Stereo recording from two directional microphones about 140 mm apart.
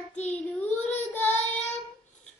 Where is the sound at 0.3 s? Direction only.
10° left (ahead or behind).